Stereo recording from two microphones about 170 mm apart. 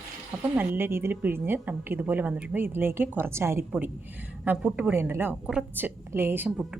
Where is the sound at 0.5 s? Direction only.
10° right (ahead or behind).